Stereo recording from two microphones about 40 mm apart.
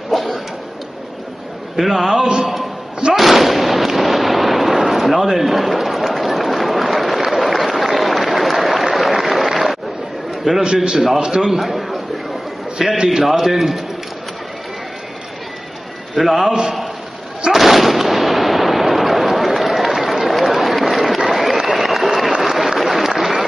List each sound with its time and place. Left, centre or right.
0.1 s a sound: centre
1.8 s a man's voice: centre
3.2 s fireworks: centre
7.2 s a sound: centre
10.5 s a man's voice: centre
11.6 s a man's voice: centre
16.2 s a man's voice: centre
17.5 s fireworks: centre
22.4 s a sound: centre
22.8 s applause: centre